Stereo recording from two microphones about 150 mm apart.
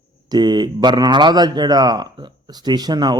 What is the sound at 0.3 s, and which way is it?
A man's voice, 30° right (ahead or behind).